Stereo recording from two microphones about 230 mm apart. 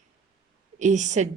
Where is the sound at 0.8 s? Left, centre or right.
Right.